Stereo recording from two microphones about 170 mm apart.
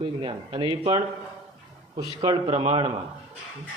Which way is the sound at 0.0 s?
30° right (ahead or behind).